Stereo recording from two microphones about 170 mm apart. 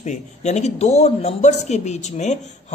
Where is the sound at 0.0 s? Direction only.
45° left (ahead or behind).